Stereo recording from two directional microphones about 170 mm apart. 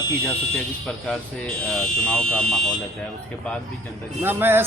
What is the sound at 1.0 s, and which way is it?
Speech, 5° left (ahead or behind).